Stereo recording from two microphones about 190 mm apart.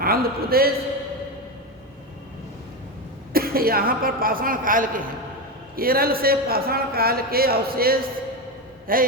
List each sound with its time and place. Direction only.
0.0 s a man's voice: 50° right (ahead or behind)
3.3 s a man's voice: 50° right (ahead or behind)